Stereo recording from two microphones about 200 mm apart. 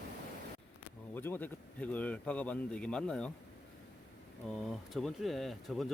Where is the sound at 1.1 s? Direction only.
10° left (ahead or behind).